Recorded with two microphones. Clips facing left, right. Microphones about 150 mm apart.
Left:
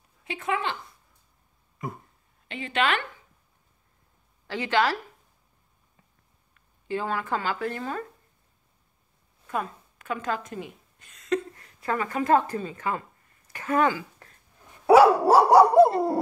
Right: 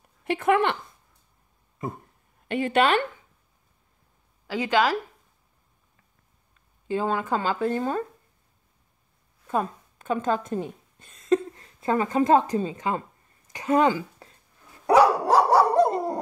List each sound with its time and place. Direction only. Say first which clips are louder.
0.2 s speech: right 8 dB; 60° right (ahead or behind)
2.4 s a woman's voice: right 9 dB; 55° right (ahead or behind)
4.5 s speech: right 2 dB; 10° right (ahead or behind)
6.9 s speech: right 3 dB; 20° right (ahead or behind)
9.5 s a woman's voice: right 4 dB; 25° right (ahead or behind)
13.5 s a sound: right 3 dB; 20° right (ahead or behind)
14.9 s dog: left 3 dB; 10° left (ahead or behind)